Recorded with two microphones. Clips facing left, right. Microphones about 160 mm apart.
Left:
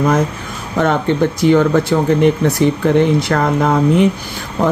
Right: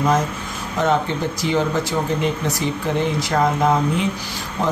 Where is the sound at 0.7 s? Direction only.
60° left (ahead or behind).